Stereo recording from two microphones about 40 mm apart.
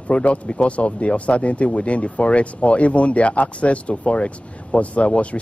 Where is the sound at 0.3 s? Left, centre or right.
Left.